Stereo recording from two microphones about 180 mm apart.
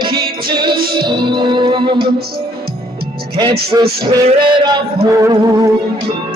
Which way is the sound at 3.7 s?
20° right (ahead or behind).